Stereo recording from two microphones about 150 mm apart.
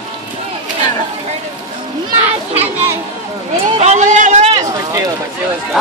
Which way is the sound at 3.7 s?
50° right (ahead or behind).